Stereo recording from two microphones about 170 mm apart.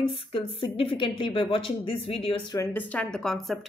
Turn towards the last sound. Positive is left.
turn(degrees=0)  # may be behind; listen again after turning